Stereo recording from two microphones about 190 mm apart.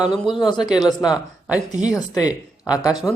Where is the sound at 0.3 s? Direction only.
25° left (ahead or behind).